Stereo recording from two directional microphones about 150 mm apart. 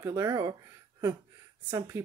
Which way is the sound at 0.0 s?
20° right (ahead or behind).